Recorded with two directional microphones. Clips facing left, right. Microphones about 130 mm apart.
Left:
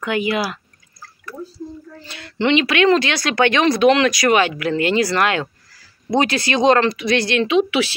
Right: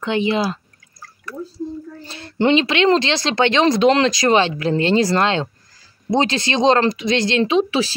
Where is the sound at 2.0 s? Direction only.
30° right (ahead or behind).